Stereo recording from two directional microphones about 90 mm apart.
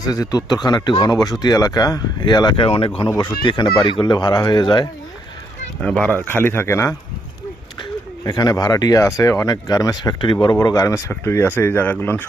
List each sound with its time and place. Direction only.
0.0 s speech: 45° left (ahead or behind); by 2.9 s 85° left
3.4 s speech: 60° left (ahead or behind)
5.8 s speech: 10° left (ahead or behind)
6.1 s speech: 25° left (ahead or behind)
8.2 s speech: 50° left (ahead or behind)
10.4 s speech: 45° left (ahead or behind)
11.1 s speech: 25° left (ahead or behind)